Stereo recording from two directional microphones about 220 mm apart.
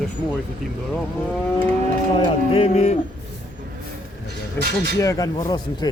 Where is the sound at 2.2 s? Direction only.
25° left (ahead or behind).